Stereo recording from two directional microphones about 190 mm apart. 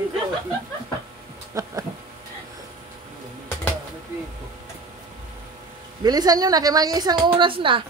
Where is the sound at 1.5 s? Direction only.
15° right (ahead or behind).